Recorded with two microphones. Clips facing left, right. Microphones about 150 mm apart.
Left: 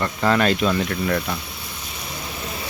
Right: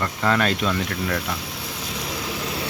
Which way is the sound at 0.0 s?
5° left (ahead or behind).